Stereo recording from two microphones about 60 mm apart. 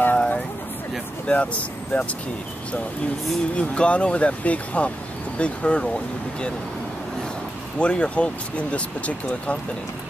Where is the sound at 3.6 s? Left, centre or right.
Centre.